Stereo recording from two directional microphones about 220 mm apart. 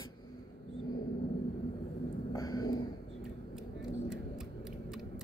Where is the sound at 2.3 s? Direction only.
15° left (ahead or behind).